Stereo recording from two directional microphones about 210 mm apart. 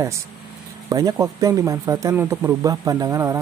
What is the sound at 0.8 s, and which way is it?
Speech, 15° right (ahead or behind).